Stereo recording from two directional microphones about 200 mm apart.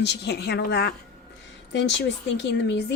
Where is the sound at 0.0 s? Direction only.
55° left (ahead or behind).